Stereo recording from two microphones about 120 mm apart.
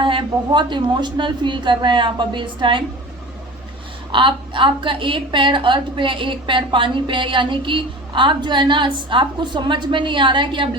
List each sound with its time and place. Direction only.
0.0 s a woman's voice: 40° right (ahead or behind)
4.1 s a woman's voice: 45° right (ahead or behind)